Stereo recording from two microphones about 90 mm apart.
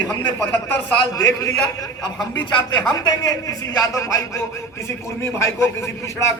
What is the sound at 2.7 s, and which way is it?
A man's voice, 45° left (ahead or behind).